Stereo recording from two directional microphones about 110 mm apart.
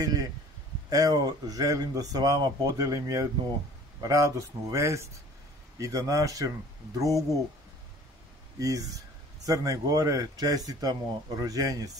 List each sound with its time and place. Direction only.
0.0 s a sound: 35° right (ahead or behind)
0.8 s speech: 35° right (ahead or behind)
8.5 s speech: 30° right (ahead or behind)